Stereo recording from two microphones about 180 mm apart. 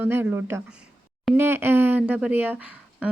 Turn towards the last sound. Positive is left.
turn(degrees=-5)  # may be behind; listen again after turning